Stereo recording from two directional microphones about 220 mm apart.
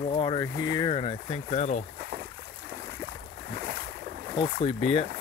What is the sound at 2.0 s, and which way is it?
Boat, 45° right (ahead or behind).